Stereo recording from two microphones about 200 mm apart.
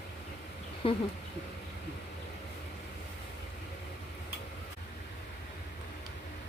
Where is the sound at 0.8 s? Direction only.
25° left (ahead or behind).